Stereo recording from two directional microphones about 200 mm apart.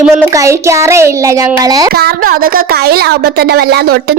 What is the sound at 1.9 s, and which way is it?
Speech, 50° right (ahead or behind).